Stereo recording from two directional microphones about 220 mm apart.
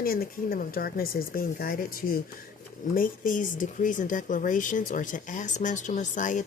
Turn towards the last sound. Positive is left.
turn(degrees=35)  # may be behind; listen again after turning